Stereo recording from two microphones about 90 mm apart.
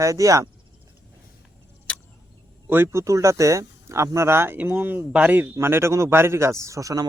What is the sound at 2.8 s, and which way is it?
A man's voice, 35° right (ahead or behind).